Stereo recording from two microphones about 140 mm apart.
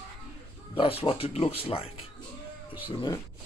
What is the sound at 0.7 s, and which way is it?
Speech, 40° left (ahead or behind).